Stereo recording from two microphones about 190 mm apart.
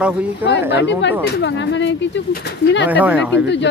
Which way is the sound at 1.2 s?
70° left (ahead or behind).